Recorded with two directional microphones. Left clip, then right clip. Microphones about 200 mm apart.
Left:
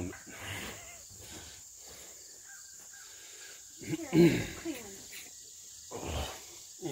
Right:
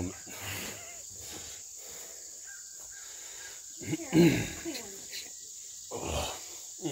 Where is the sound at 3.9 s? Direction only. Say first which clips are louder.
Right 1 dB; 50° right (ahead or behind).